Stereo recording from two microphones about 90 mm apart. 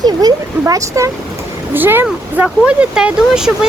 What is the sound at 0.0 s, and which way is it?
Speech, 50° right (ahead or behind).